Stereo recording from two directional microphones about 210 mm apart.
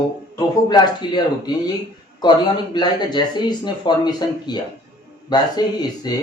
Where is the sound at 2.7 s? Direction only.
20° left (ahead or behind).